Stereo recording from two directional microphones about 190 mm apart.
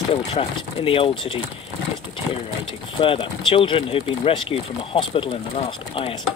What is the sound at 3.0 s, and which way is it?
Speech, 30° left (ahead or behind).